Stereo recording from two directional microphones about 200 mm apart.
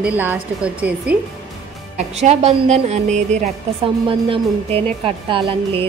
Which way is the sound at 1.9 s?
35° right (ahead or behind).